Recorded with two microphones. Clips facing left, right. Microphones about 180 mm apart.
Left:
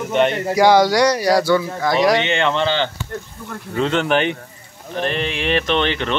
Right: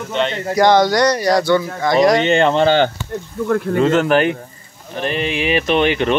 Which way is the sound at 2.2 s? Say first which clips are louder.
Right 5 dB; 40° right (ahead or behind).